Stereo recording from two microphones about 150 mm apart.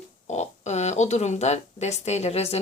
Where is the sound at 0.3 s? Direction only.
50° left (ahead or behind).